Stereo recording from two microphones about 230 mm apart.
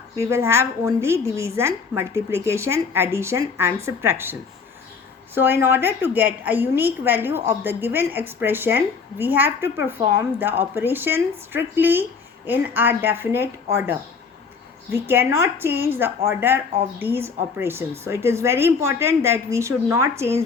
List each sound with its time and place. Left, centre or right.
0.2 s a woman's voice: centre
14.9 s a woman's voice: centre